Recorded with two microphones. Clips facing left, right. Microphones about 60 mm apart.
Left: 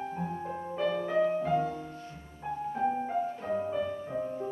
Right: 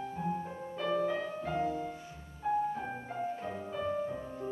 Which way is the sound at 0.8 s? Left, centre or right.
Centre.